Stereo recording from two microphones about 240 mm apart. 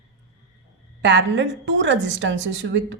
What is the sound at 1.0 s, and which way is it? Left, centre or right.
A woman's voice, right.